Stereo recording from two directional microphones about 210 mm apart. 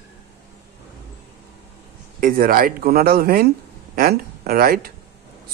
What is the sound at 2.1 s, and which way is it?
A man's voice, 40° right (ahead or behind).